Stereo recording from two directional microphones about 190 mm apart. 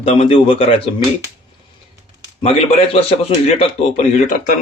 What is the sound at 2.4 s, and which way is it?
A man's voice, 30° left (ahead or behind).